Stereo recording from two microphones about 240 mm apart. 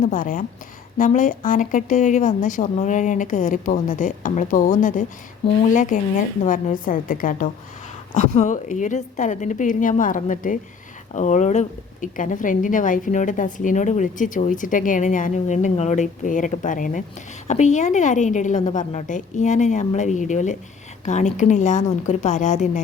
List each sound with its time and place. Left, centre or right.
0.0 s a woman's voice: left